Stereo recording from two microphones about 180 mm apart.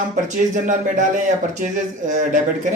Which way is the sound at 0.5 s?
45° right (ahead or behind).